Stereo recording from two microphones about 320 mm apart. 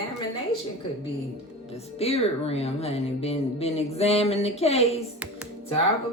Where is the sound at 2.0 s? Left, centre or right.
Centre.